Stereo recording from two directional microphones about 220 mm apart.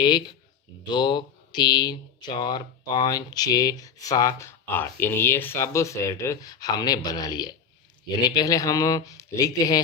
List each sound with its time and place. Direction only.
0.9 s speech: 20° left (ahead or behind)